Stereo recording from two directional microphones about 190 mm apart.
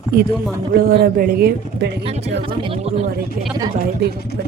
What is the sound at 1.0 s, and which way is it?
Speech, 50° right (ahead or behind).